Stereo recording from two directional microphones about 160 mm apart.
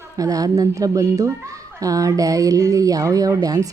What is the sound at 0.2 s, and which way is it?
Speech, 20° right (ahead or behind).